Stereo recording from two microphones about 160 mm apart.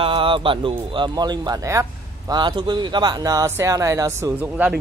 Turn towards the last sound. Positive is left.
turn(degrees=-10)  # may be behind; listen again after turning